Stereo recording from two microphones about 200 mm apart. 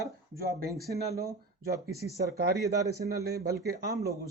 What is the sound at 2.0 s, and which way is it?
Speech, 50° right (ahead or behind).